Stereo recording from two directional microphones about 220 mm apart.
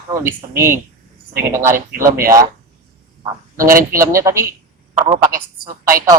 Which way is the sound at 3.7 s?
40° right (ahead or behind).